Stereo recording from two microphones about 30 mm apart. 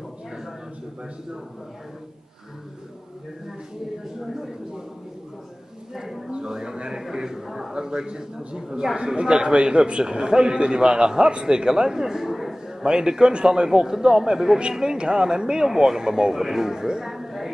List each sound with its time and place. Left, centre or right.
4.0 s speech: centre
5.9 s a man's voice: centre
6.3 s a man's voice: right
7.7 s a man's voice: right
8.9 s a man's voice: right
12.2 s a sound: centre
12.8 s a man's voice: right
13.7 s a man's voice: centre